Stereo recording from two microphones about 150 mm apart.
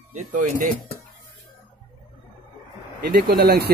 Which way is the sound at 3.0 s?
80° right.